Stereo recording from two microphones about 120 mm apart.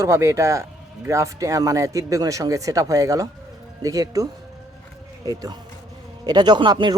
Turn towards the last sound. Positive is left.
turn(degrees=-40)  # may be behind; listen again after turning